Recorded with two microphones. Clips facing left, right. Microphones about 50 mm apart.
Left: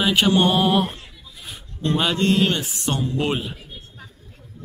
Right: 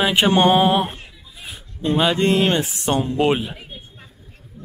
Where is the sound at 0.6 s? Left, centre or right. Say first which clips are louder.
Right 2 dB; centre.